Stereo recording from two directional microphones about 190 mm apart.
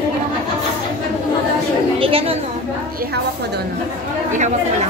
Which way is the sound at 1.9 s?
30° right (ahead or behind).